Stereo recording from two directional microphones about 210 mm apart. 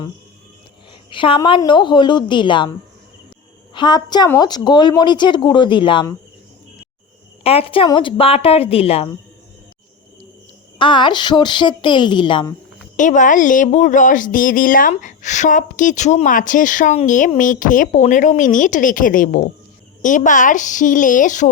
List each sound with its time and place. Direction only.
1.1 s a woman's voice: 25° left (ahead or behind)
3.8 s a woman's voice: 20° left (ahead or behind)
7.4 s a woman's voice: 25° left (ahead or behind)
10.8 s a woman's voice: 25° left (ahead or behind)
13.0 s speech: 35° left (ahead or behind)